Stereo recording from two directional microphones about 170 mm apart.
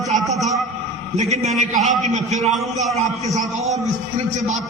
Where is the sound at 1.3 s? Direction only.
40° right (ahead or behind).